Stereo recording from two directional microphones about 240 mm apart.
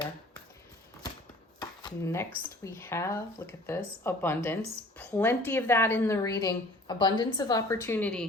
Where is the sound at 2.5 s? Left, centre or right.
Centre.